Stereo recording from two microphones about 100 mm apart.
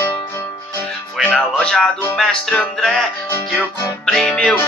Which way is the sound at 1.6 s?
5° left (ahead or behind).